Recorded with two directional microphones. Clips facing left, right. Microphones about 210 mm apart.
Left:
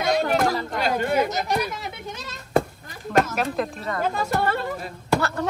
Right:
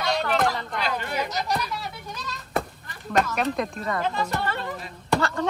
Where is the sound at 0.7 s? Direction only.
45° left (ahead or behind).